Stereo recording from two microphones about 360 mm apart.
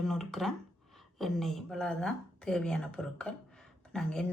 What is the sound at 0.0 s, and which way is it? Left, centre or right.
Speech, centre.